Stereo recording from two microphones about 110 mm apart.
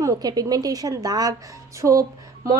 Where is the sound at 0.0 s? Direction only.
35° right (ahead or behind).